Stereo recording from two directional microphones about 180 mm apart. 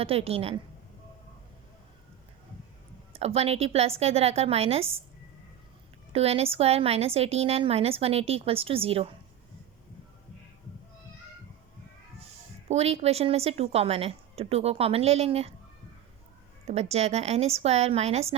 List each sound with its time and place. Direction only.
0.0 s a woman's voice: 35° right (ahead or behind)
3.1 s a woman's voice: 35° right (ahead or behind)
6.1 s a woman's voice: 35° right (ahead or behind)
12.6 s a woman's voice: 35° right (ahead or behind)
16.6 s a woman's voice: 35° right (ahead or behind)